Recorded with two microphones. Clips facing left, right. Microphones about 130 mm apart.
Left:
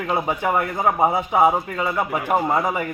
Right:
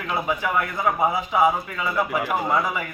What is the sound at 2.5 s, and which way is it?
Speech, 45° left (ahead or behind).